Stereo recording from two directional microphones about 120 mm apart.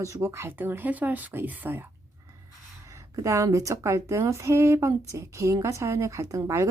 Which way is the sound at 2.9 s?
25° right (ahead or behind).